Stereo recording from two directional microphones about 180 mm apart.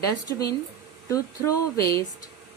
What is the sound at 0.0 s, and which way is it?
Speech, 20° left (ahead or behind).